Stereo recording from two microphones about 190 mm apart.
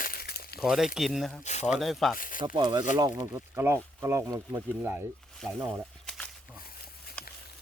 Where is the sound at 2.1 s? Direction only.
45° left (ahead or behind).